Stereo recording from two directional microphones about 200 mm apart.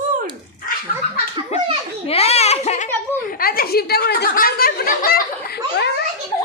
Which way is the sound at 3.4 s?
50° left (ahead or behind).